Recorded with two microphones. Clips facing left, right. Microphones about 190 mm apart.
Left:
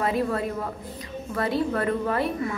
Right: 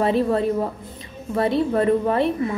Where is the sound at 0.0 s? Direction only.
25° right (ahead or behind).